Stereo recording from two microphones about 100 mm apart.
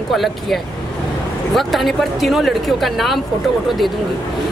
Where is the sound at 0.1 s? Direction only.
Centre (ahead or behind).